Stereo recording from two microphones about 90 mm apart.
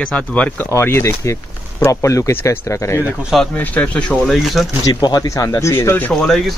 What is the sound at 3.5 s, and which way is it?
Speech, 15° left (ahead or behind).